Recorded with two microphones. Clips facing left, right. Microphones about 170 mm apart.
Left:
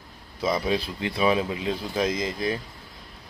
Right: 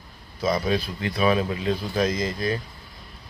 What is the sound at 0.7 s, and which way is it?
Speech, 20° left (ahead or behind).